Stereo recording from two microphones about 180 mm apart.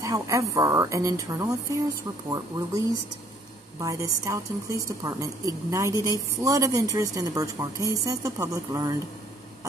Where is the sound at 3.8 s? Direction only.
15° right (ahead or behind).